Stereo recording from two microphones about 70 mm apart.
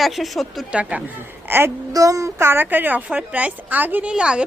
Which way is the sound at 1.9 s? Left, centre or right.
Right.